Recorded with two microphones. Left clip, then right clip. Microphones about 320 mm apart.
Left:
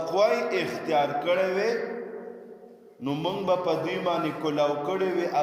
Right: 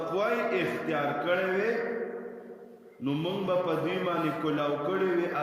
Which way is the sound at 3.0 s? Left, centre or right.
Centre.